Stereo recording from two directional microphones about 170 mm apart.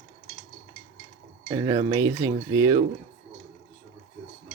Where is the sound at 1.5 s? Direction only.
30° right (ahead or behind).